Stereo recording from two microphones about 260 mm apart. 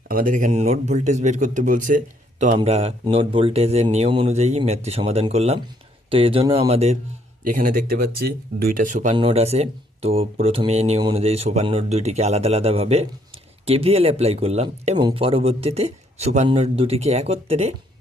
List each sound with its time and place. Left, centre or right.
0.1 s speech: right